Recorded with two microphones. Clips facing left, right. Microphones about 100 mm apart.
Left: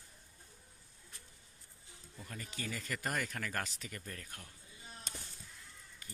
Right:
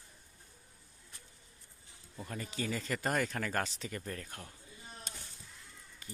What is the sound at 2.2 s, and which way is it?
Speech, 30° right (ahead or behind).